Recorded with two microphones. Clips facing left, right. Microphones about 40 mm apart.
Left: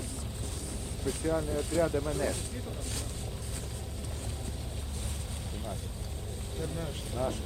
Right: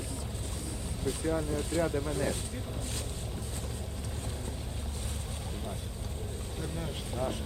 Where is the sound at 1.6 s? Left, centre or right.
Right.